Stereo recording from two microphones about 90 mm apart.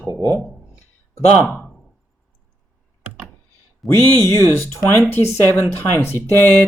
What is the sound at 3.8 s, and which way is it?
Speech, centre (ahead or behind).